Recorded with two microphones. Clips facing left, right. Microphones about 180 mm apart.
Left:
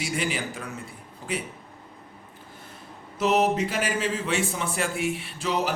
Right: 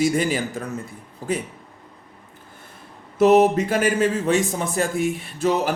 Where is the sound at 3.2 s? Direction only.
50° right (ahead or behind).